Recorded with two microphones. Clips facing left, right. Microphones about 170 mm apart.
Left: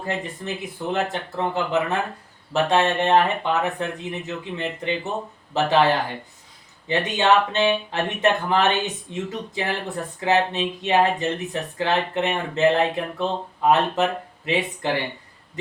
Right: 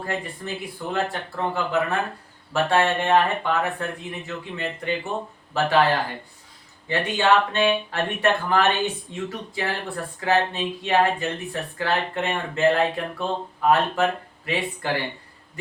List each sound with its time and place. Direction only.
0.0 s speech: 20° left (ahead or behind)